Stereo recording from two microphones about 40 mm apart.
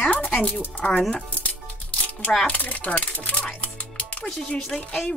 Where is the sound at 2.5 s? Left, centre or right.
Left.